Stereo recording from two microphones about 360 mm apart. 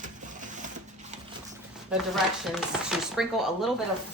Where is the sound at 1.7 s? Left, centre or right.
Centre.